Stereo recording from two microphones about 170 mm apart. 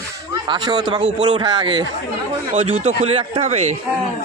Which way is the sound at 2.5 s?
45° right (ahead or behind).